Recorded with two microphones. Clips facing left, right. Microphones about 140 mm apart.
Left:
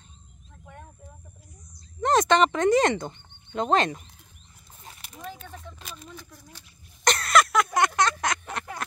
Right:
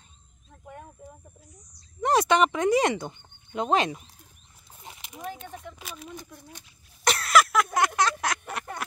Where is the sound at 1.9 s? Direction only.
10° right (ahead or behind).